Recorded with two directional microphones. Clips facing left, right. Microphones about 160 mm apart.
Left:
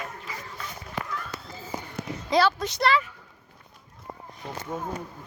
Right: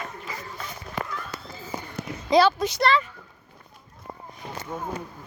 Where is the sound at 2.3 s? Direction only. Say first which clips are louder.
Right 4 dB; 15° right (ahead or behind).